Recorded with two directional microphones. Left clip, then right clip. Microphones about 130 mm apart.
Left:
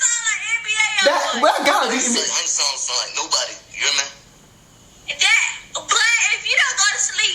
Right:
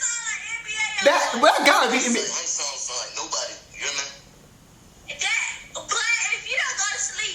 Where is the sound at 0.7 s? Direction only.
50° left (ahead or behind).